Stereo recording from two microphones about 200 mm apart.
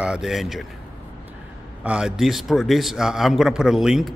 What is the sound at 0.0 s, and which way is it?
Speech, 5° right (ahead or behind).